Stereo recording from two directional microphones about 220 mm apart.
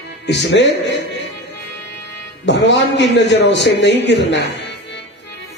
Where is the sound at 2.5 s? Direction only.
55° left (ahead or behind).